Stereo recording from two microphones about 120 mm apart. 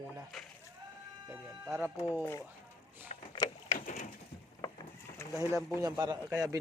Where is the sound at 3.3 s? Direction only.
30° left (ahead or behind).